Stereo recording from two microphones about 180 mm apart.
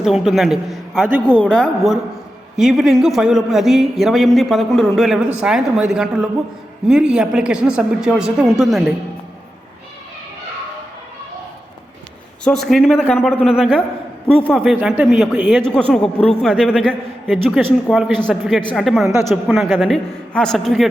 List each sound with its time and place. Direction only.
0.0 s a man's voice: 5° right (ahead or behind)
12.5 s a man's voice: centre (ahead or behind)
19.0 s speech: 15° right (ahead or behind)
19.3 s a man's voice: centre (ahead or behind)